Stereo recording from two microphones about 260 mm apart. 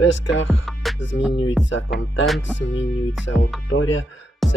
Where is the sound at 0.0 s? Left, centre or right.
Left.